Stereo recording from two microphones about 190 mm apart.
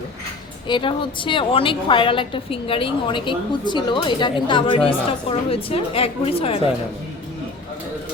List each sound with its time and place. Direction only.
0.7 s a woman's voice: 25° left (ahead or behind)